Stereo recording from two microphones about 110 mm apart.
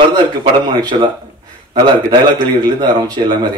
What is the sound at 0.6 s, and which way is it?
Speech, 45° right (ahead or behind).